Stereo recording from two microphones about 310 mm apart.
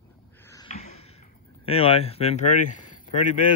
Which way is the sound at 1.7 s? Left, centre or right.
Centre.